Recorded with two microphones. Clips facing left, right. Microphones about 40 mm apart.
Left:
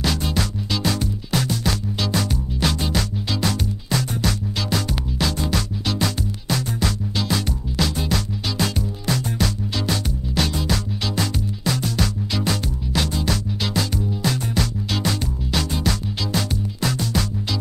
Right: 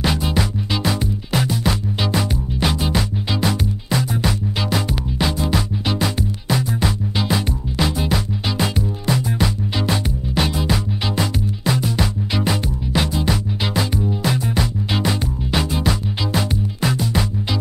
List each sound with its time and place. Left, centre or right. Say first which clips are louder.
0.0 s music: right 3 dB; centre